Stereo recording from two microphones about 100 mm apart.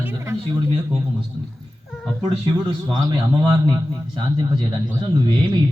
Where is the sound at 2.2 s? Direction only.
50° right (ahead or behind).